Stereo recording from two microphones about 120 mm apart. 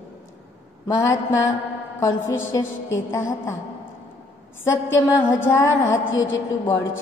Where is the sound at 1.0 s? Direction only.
25° left (ahead or behind).